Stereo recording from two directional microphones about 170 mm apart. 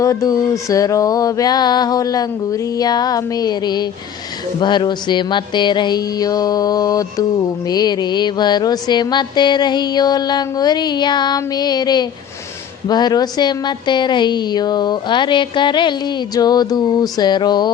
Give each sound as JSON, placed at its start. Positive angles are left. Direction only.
{"t": 0.0, "sound": "a woman's voice", "side_deg": 20}